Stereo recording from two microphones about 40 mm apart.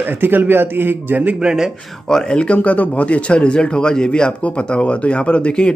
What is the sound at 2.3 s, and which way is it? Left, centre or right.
Speech, left.